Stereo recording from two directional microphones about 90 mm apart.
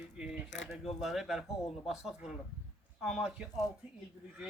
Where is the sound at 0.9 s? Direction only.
5° right (ahead or behind).